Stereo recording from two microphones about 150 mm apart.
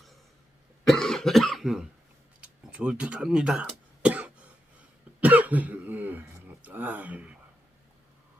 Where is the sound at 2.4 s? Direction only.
5° right (ahead or behind).